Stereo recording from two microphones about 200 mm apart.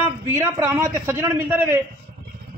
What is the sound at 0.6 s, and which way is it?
A man's voice, 10° right (ahead or behind).